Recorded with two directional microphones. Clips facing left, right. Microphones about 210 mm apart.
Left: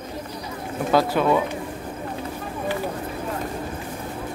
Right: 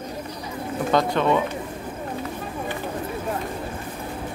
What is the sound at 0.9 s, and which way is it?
Speech, 5° left (ahead or behind).